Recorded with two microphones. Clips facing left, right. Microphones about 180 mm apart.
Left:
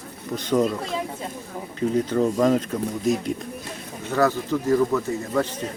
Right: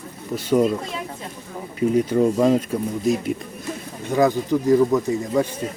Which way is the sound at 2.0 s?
10° right (ahead or behind).